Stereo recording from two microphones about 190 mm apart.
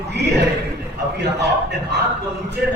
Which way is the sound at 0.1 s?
60° right (ahead or behind).